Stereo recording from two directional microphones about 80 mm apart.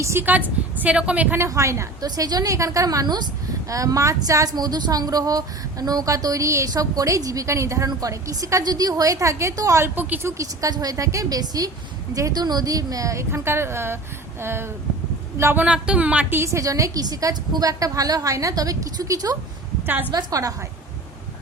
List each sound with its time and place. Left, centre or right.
0.0 s a woman's voice: right
0.3 s a woman's voice: right
1.4 s a woman's voice: right
2.0 s speech: right
3.7 s a woman's voice: right
8.6 s speech: right
9.8 s a woman's voice: right
10.2 s a woman's voice: right
15.5 s a woman's voice: centre
16.3 s speech: right